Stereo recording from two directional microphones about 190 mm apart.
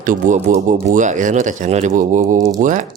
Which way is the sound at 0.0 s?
45° right (ahead or behind).